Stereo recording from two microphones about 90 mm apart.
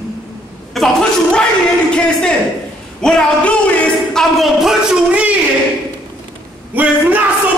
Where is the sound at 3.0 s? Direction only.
10° left (ahead or behind).